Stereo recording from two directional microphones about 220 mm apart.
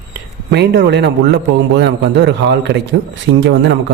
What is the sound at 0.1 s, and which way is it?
A man's voice, 50° right (ahead or behind).